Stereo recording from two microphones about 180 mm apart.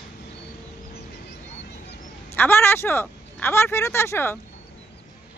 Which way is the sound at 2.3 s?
10° left (ahead or behind).